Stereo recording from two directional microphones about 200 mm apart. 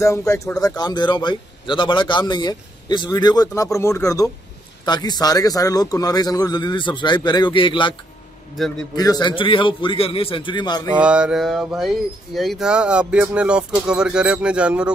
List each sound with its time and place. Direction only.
0.0 s a man's voice: 15° left (ahead or behind)
8.6 s speech: centre (ahead or behind)
8.9 s a man's voice: 20° left (ahead or behind)
11.0 s speech: 5° right (ahead or behind)